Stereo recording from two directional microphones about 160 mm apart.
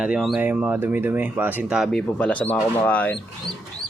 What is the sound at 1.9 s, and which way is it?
Speech, 5° left (ahead or behind).